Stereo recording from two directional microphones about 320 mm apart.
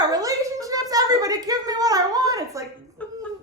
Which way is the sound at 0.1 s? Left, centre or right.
Centre.